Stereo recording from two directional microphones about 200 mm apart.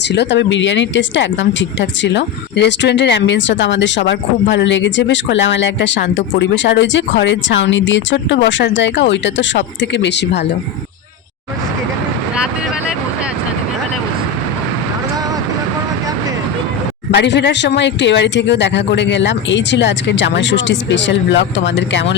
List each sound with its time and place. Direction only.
0.1 s speech: 60° left (ahead or behind)
17.2 s speech: 60° left (ahead or behind)